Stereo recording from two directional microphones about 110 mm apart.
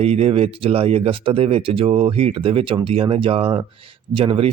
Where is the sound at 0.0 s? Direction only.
65° right (ahead or behind).